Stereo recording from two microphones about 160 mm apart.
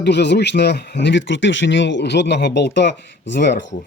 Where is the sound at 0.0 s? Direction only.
90° left.